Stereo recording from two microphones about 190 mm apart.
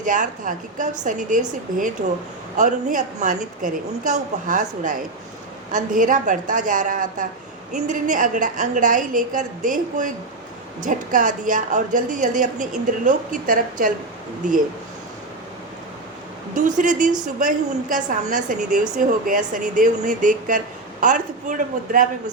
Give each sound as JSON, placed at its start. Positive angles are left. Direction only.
{"t": 0.0, "sound": "a woman's voice", "side_deg": -45}
{"t": 16.6, "sound": "a woman's voice", "side_deg": -40}